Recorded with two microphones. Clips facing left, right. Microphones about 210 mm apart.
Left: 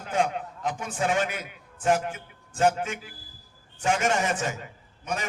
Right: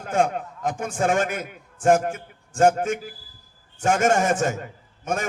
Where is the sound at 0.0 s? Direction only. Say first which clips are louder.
Right 4 dB; 50° right (ahead or behind).